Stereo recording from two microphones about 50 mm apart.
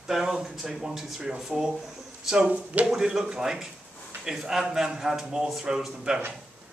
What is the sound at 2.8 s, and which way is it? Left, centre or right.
Speech, centre.